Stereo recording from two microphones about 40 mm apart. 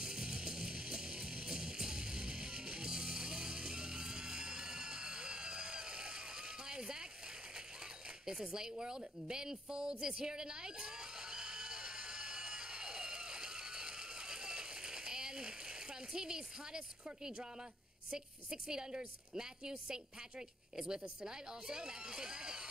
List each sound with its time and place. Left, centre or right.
0.0 s music: centre
8.3 s a sound: centre
18.1 s a woman's voice: centre